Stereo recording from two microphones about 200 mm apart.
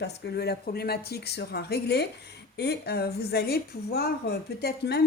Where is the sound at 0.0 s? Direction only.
55° left (ahead or behind).